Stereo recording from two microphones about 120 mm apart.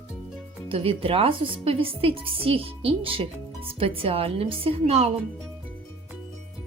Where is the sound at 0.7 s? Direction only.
50° right (ahead or behind).